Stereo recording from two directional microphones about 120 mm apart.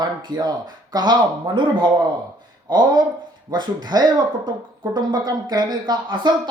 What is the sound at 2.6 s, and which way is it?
Speech, 35° right (ahead or behind).